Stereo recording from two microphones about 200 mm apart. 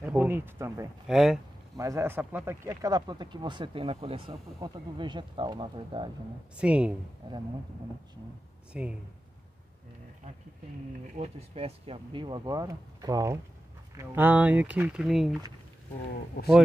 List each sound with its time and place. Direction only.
0.0 s speech: 10° right (ahead or behind)
1.0 s a woman's voice: centre (ahead or behind)
1.8 s speech: 15° right (ahead or behind)
6.5 s a woman's voice: 5° right (ahead or behind)
8.7 s a woman's voice: 5° right (ahead or behind)
11.1 s speech: 30° right (ahead or behind); by 15.3 s centre (ahead or behind)